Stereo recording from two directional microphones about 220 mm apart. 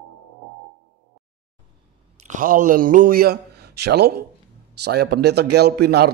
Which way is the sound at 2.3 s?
35° right (ahead or behind).